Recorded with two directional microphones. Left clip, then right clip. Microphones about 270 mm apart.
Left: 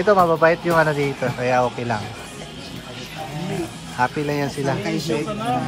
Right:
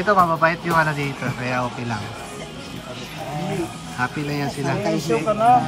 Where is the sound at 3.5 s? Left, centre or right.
Centre.